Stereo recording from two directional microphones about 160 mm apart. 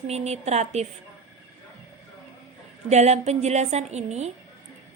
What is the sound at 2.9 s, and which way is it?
A woman's voice, 45° right (ahead or behind).